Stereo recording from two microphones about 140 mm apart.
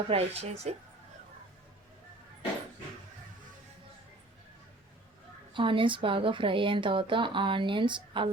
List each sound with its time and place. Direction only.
0.1 s speech: 45° right (ahead or behind)
5.5 s speech: 35° right (ahead or behind)